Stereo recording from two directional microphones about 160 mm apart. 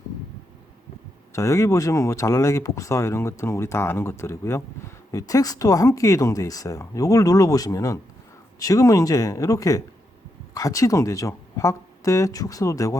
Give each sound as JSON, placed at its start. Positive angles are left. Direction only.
{"t": 1.3, "sound": "speech", "side_deg": 20}